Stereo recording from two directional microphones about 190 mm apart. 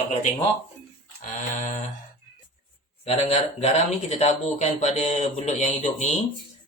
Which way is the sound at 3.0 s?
35° left (ahead or behind).